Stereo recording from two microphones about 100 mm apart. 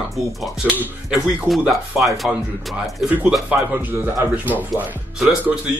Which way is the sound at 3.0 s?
15° right (ahead or behind).